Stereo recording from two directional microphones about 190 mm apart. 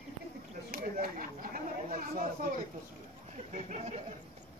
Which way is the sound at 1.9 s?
45° right (ahead or behind).